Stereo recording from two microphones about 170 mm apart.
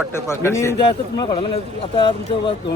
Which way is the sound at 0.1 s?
15° left (ahead or behind).